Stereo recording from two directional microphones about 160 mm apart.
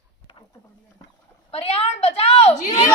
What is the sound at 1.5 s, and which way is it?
A woman's voice, 35° left (ahead or behind).